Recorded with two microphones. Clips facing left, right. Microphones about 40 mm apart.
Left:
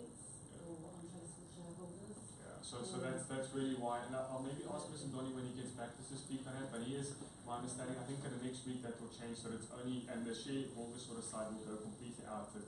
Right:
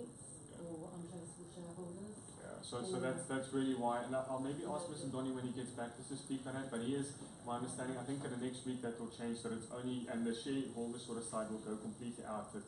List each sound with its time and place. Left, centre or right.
2.7 s a man's voice: centre